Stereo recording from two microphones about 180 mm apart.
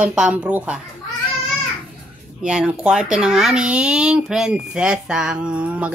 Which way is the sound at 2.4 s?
5° right (ahead or behind).